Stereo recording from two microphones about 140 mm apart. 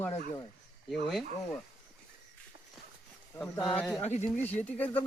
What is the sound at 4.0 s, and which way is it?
Speech, 55° left (ahead or behind).